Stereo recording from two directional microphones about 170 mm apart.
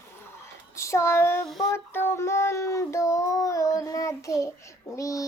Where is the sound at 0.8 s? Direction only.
15° left (ahead or behind).